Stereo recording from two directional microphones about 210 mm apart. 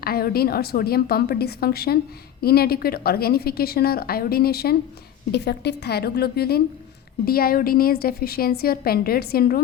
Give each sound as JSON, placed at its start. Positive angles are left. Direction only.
{"t": 0.0, "sound": "a woman's voice", "side_deg": 45}